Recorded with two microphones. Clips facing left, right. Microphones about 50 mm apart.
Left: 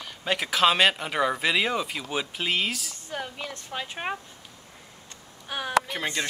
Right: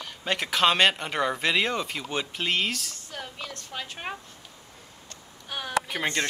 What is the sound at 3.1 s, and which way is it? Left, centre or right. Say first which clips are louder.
A woman's voice: left 5 dB; centre.